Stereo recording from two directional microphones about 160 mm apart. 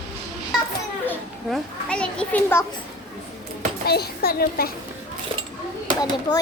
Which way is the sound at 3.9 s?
75° left (ahead or behind).